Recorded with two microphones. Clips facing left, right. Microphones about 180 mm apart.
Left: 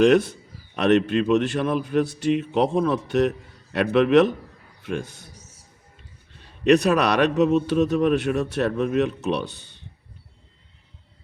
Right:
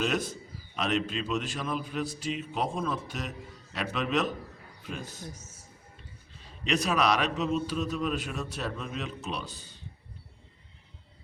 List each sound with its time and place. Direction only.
0.0 s a man's voice: 65° left (ahead or behind)
6.3 s a man's voice: 65° left (ahead or behind)